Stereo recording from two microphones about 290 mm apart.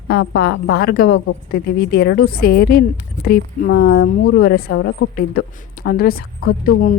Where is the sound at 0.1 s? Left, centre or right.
Left.